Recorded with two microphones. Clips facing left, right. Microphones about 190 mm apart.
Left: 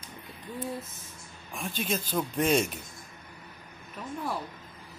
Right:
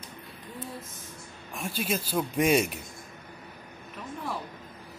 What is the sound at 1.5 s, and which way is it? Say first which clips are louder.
Speech: right 1 dB; 5° right (ahead or behind).